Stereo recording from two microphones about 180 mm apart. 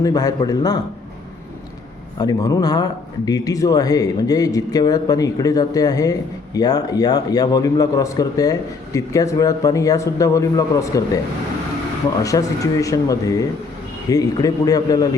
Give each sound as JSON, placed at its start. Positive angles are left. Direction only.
{"t": 0.0, "sound": "a man's voice", "side_deg": 20}
{"t": 2.1, "sound": "a man's voice", "side_deg": 20}
{"t": 12.2, "sound": "a man's voice", "side_deg": 20}